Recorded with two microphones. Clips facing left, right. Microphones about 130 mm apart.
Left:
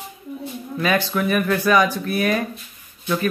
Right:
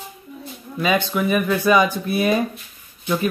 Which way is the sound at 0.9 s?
15° right (ahead or behind).